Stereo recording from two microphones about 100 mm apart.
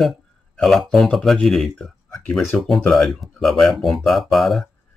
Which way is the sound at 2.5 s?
15° left (ahead or behind).